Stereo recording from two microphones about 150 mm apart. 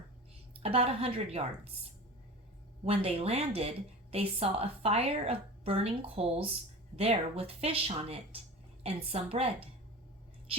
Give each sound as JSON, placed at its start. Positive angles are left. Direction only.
{"t": 0.6, "sound": "a woman's voice", "side_deg": -40}
{"t": 2.8, "sound": "a woman's voice", "side_deg": -40}